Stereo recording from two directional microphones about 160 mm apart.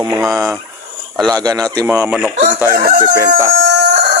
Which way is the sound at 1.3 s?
20° right (ahead or behind).